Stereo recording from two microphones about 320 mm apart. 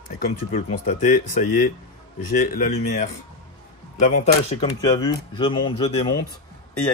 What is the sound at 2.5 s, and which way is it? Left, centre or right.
Speech, left.